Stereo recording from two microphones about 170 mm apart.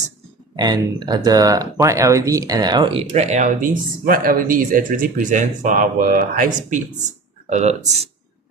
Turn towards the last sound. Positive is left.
turn(degrees=-40)  # may be behind; listen again after turning